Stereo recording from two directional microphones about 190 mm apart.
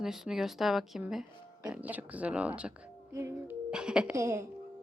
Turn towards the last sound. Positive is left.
turn(degrees=-15)  # may be behind; listen again after turning